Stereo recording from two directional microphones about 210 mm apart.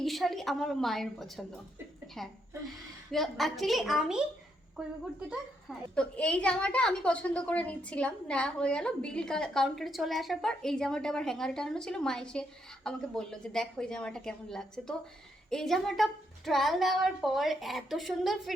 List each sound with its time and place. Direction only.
0.0 s a woman's voice: centre (ahead or behind)
3.1 s a woman's voice: centre (ahead or behind)
5.9 s a woman's voice: 5° left (ahead or behind)